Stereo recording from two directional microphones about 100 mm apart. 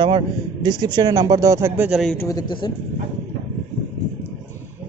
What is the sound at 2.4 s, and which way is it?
Speech, 50° left (ahead or behind).